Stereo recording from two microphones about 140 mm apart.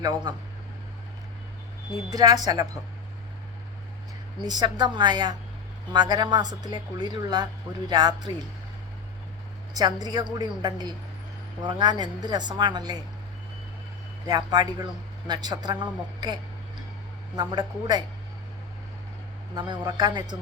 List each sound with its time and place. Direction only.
0.3 s a woman's voice: 30° right (ahead or behind)
2.1 s a woman's voice: 25° right (ahead or behind)
4.4 s a woman's voice: 30° right (ahead or behind)
9.7 s a woman's voice: 30° right (ahead or behind)
14.3 s a woman's voice: 30° right (ahead or behind)
19.5 s a woman's voice: 30° right (ahead or behind)